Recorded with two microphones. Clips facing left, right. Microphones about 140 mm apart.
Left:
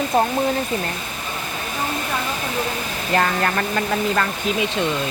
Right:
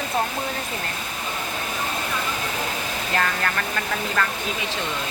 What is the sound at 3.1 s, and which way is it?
Speech, 30° left (ahead or behind).